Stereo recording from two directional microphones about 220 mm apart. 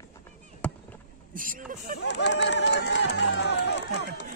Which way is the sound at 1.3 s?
40° right (ahead or behind).